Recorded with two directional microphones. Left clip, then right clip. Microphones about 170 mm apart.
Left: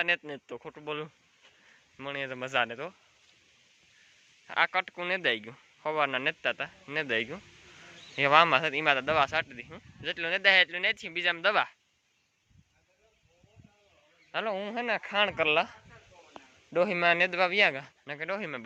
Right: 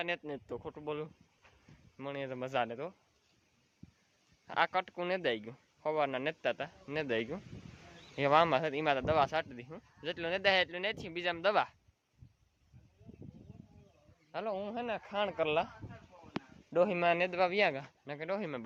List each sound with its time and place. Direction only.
0.0 s speech: 5° right (ahead or behind)
4.4 s speech: 20° right (ahead or behind)
14.4 s speech: 20° left (ahead or behind)
15.1 s speech: 10° left (ahead or behind)
16.7 s speech: 10° left (ahead or behind); by 18.6 s 10° right (ahead or behind)